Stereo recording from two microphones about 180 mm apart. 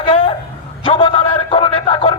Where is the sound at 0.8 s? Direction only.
30° left (ahead or behind).